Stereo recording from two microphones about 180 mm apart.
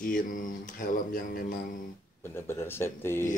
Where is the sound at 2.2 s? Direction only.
15° left (ahead or behind).